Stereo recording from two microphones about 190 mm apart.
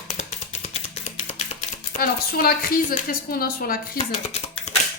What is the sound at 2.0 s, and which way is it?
Speech, 50° left (ahead or behind).